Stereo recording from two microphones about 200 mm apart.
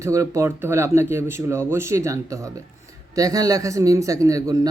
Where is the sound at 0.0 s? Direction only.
15° right (ahead or behind).